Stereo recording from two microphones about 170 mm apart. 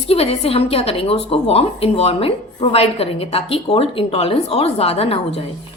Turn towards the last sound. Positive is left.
turn(degrees=35)  # may be behind; listen again after turning